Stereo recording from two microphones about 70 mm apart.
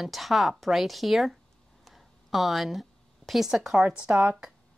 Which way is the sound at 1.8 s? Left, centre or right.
Centre.